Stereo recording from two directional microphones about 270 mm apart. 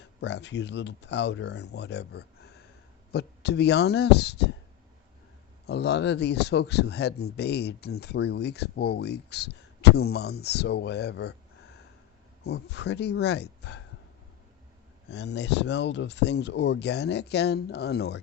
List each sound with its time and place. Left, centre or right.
0.2 s speech: left
5.6 s speech: left
12.4 s speech: left
15.1 s speech: left